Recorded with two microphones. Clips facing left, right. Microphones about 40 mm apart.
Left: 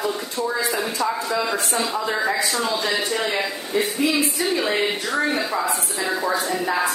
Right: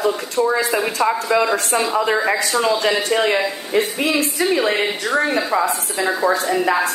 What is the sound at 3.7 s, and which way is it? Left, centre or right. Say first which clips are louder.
Speech: right 2 dB; right.